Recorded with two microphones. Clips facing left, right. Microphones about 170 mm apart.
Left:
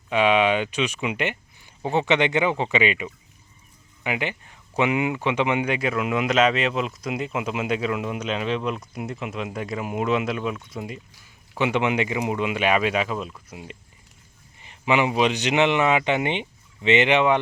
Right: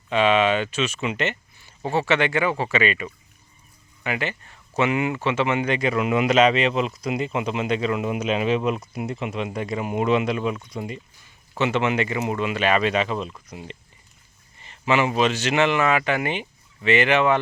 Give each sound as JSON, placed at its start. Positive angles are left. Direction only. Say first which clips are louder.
{"t": 0.1, "sound": "speech", "louder": "even", "side_deg": 10}